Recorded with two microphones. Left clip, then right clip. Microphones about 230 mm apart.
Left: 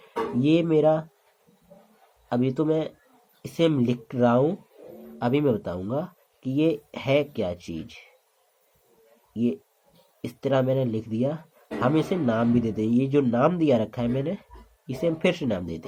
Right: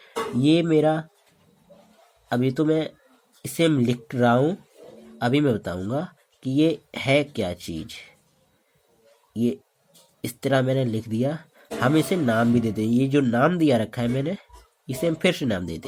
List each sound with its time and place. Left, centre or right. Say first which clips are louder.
0.0 s speech: right 2 dB; right
2.3 s speech: right 2 dB; right
9.3 s speech: right 2 dB; right